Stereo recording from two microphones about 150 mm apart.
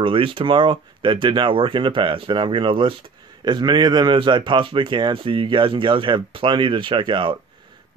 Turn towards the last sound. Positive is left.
turn(degrees=-30)  # may be behind; listen again after turning